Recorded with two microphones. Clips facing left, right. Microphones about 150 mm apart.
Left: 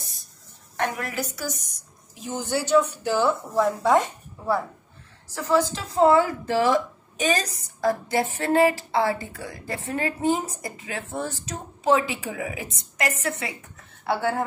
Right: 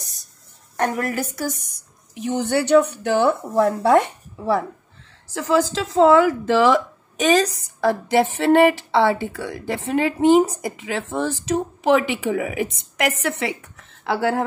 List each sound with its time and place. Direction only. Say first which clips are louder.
0.0 s a sound: right 2 dB; 40° right (ahead or behind)
0.7 s a woman's voice: right 5 dB; 45° right (ahead or behind)
2.1 s a woman's voice: right 6 dB; 70° right (ahead or behind)
5.3 s a woman's voice: right 3 dB; 90° right